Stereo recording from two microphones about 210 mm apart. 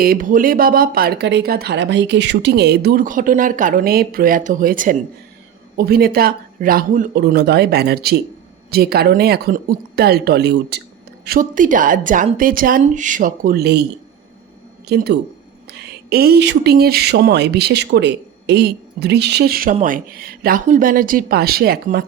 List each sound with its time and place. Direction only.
0.0 s speech: 40° right (ahead or behind)
11.3 s a woman's voice: 40° right (ahead or behind)
14.8 s speech: 50° right (ahead or behind)